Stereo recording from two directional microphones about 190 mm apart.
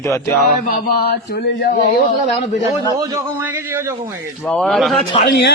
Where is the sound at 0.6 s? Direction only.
50° left (ahead or behind).